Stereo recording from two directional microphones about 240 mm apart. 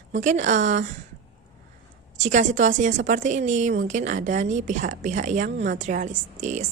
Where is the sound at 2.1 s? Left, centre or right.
Right.